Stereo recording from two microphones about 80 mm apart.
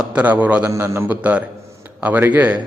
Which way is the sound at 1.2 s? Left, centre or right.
Centre.